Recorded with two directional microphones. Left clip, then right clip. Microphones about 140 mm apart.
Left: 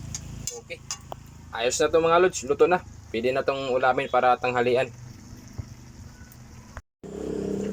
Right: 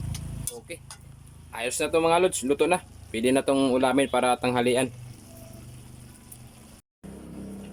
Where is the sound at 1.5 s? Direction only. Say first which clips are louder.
Left 4 dB; 10° right (ahead or behind).